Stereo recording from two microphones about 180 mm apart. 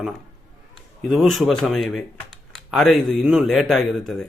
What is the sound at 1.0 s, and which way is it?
Speech, centre (ahead or behind).